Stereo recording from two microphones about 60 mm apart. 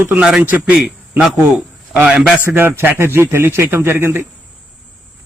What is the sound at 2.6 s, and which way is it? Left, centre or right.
A man's voice, right.